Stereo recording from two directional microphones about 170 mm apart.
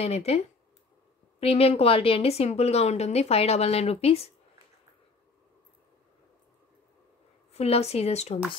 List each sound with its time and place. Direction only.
0.0 s a woman's voice: 35° left (ahead or behind)
1.4 s a woman's voice: 35° left (ahead or behind)
7.5 s a woman's voice: 40° left (ahead or behind)